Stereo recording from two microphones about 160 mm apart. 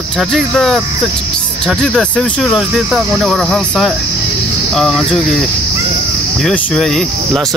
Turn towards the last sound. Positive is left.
turn(degrees=0)  # may be behind; listen again after turning